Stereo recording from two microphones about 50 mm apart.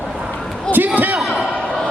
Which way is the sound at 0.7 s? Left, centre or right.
Right.